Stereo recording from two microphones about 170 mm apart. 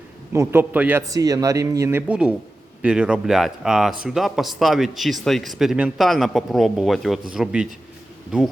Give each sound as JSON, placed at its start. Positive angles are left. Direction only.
{"t": 0.3, "sound": "a man's voice", "side_deg": -10}